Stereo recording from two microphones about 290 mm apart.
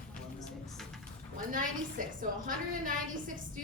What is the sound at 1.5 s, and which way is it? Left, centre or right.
A woman's voice, right.